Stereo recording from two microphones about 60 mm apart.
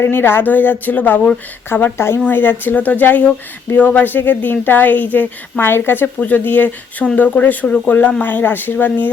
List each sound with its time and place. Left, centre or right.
0.1 s a woman's voice: left
1.7 s a woman's voice: left
7.0 s speech: centre
7.3 s a woman's voice: left